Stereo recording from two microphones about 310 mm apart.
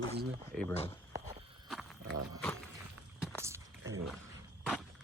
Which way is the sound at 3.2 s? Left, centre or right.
Centre.